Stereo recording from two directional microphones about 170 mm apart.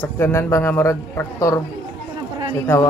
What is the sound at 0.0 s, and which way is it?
A man's voice, 15° left (ahead or behind).